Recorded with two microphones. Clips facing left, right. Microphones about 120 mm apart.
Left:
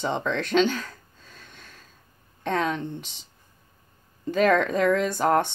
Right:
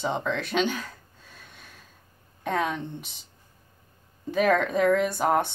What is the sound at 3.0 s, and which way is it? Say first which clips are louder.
Speech: left 2 dB; 90° left.